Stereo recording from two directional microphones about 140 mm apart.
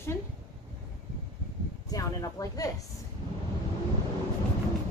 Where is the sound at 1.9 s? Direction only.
25° left (ahead or behind).